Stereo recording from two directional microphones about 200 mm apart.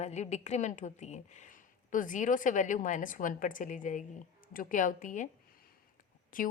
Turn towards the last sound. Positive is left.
turn(degrees=45)  # may be behind; listen again after turning